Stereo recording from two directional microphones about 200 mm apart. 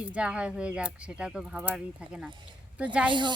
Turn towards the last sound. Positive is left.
turn(degrees=-25)  # may be behind; listen again after turning